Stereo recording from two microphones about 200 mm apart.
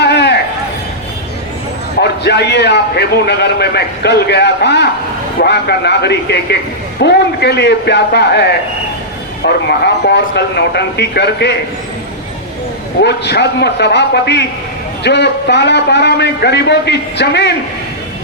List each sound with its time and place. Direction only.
0.0 s a sound: 55° left (ahead or behind)
2.0 s a man's voice: 55° left (ahead or behind)
13.0 s a man's voice: 55° left (ahead or behind)